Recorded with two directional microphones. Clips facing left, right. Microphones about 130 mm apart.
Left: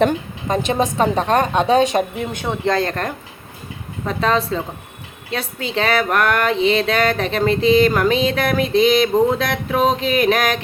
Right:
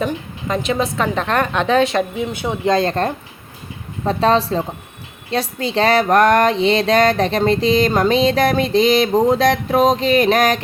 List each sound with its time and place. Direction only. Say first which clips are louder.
0.9 s a woman's voice: left 2 dB; 40° left (ahead or behind)
1.2 s a woman's voice: left 2 dB; 15° left (ahead or behind)
2.1 s speech: right 2 dB; 10° right (ahead or behind); by 10.6 s 40° right (ahead or behind)